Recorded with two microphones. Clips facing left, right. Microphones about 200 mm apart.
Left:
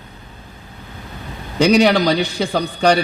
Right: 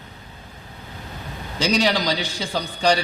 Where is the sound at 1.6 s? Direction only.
60° left (ahead or behind).